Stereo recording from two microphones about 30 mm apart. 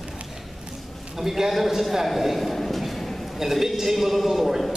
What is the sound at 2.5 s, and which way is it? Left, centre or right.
Train, centre.